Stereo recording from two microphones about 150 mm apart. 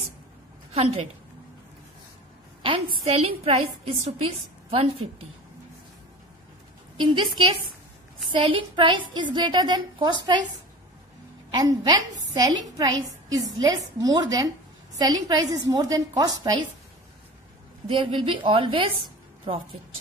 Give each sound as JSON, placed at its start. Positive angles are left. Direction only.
{"t": 2.6, "sound": "a woman's voice", "side_deg": -40}
{"t": 7.0, "sound": "a woman's voice", "side_deg": -35}
{"t": 11.5, "sound": "a woman's voice", "side_deg": -30}
{"t": 17.8, "sound": "a woman's voice", "side_deg": -35}